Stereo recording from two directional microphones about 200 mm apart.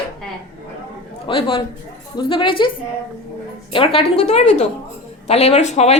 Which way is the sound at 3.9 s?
30° left (ahead or behind).